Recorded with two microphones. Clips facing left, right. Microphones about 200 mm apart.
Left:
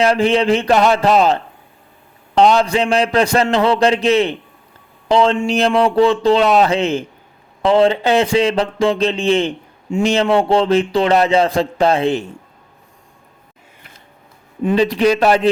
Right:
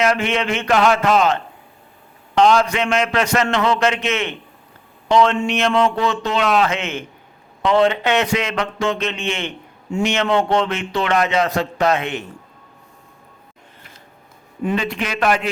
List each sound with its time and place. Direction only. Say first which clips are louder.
0.0 s speech: left 5 dB; 35° left (ahead or behind)
14.6 s speech: left 8 dB; 25° left (ahead or behind)